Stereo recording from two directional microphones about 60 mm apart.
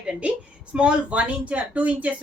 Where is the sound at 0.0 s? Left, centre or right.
Centre.